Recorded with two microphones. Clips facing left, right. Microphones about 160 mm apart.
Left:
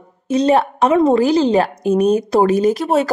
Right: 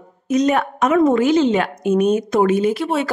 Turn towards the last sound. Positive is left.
turn(degrees=40)  # may be behind; listen again after turning